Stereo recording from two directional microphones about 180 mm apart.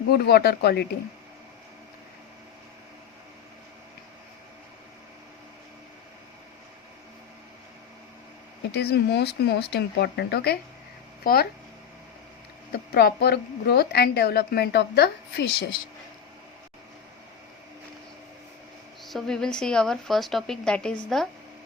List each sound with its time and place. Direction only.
0.1 s a woman's voice: 60° left (ahead or behind)
8.7 s a woman's voice: 65° left (ahead or behind)
12.7 s a woman's voice: 60° left (ahead or behind)
19.0 s speech: centre (ahead or behind)